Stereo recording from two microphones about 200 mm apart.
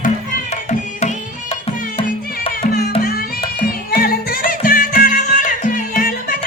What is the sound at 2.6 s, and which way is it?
Music, 50° left (ahead or behind).